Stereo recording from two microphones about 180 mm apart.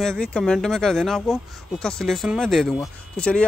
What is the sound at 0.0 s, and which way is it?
Speech, 5° left (ahead or behind).